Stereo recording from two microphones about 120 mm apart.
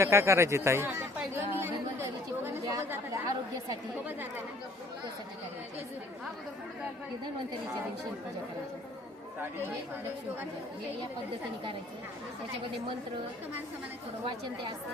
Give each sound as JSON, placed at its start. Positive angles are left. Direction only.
{"t": 0.0, "sound": "chatter", "side_deg": -25}